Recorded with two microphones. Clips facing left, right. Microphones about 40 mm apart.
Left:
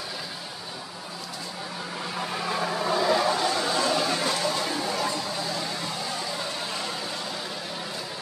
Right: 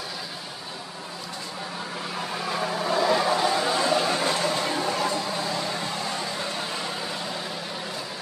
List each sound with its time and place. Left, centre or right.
2.1 s vehicle: centre; by 5.0 s right